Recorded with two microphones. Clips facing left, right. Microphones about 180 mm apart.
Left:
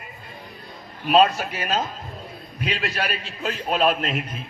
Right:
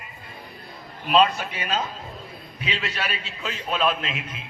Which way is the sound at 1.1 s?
45° left (ahead or behind).